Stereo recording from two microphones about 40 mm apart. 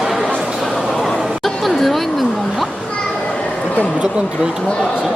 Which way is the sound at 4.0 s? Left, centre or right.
Right.